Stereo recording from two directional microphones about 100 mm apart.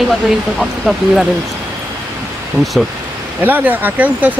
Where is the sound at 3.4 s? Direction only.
20° right (ahead or behind).